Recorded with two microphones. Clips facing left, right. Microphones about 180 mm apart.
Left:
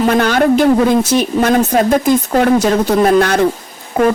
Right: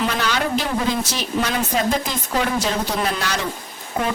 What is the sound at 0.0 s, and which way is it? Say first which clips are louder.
Speech: left 10 dB; 50° left (ahead or behind).